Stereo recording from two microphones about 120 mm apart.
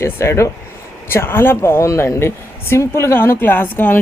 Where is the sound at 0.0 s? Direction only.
20° left (ahead or behind).